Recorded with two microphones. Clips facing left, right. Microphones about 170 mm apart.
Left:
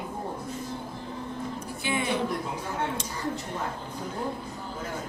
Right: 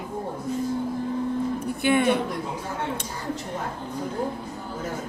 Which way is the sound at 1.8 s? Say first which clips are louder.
Right 9 dB; 60° right (ahead or behind).